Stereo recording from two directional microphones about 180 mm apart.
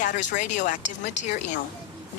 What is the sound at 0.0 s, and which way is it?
Speech, 45° left (ahead or behind).